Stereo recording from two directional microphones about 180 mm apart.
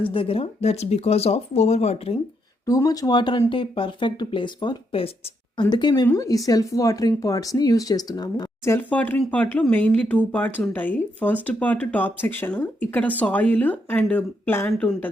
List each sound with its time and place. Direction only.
0.0 s speech: 30° left (ahead or behind)
2.6 s speech: 20° left (ahead or behind)